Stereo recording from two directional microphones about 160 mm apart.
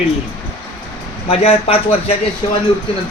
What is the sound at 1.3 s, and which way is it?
Speech, 35° left (ahead or behind).